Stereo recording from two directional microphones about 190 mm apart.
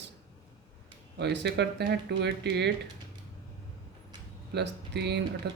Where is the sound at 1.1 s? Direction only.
65° right (ahead or behind).